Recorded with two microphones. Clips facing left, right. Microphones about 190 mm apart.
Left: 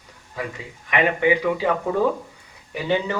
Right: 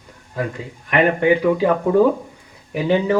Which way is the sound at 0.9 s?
50° right (ahead or behind).